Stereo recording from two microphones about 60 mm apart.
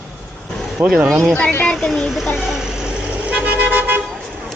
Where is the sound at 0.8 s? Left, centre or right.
Right.